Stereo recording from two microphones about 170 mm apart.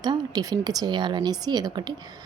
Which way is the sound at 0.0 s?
25° right (ahead or behind).